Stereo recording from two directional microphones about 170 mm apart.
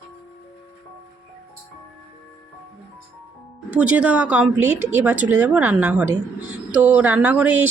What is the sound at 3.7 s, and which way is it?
Speech, 5° right (ahead or behind).